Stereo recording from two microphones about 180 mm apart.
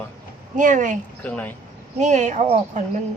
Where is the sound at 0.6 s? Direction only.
45° right (ahead or behind).